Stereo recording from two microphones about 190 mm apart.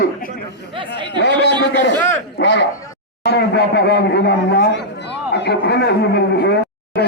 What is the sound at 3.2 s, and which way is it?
Speech, 60° left (ahead or behind).